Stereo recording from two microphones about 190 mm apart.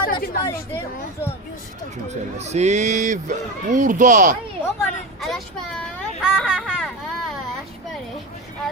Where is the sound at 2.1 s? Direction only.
35° right (ahead or behind).